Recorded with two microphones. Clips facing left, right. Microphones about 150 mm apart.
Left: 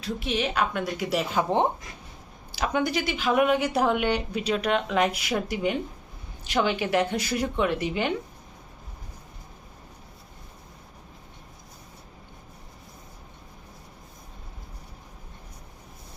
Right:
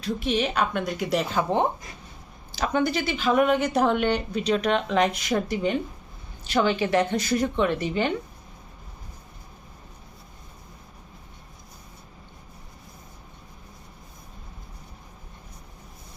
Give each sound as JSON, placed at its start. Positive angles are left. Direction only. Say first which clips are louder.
{"t": 0.0, "sound": "a woman's voice", "louder": "right 3 dB", "side_deg": 5}
{"t": 1.4, "sound": "speech", "louder": "left 2 dB", "side_deg": 15}